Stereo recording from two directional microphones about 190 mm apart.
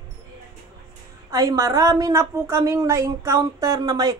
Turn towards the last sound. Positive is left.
turn(degrees=-20)  # may be behind; listen again after turning